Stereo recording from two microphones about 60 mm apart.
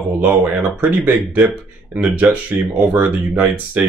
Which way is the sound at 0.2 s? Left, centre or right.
Right.